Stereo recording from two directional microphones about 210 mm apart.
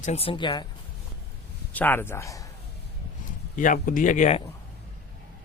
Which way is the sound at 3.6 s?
40° left (ahead or behind).